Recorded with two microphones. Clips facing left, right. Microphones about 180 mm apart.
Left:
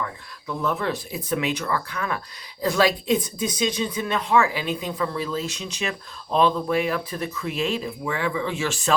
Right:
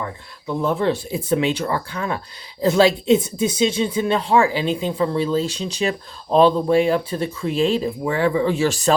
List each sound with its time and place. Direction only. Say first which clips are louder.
0.0 s speech: right 3 dB; 25° right (ahead or behind)